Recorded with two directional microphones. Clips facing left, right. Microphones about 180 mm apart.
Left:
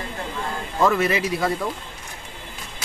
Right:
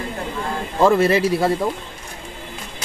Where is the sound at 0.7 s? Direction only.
30° right (ahead or behind).